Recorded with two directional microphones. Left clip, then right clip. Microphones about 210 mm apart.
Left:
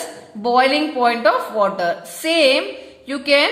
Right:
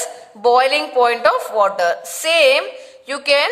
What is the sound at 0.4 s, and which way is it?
A woman's voice, 30° right (ahead or behind).